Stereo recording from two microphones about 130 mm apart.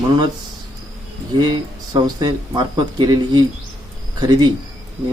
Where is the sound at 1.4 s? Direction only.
30° right (ahead or behind).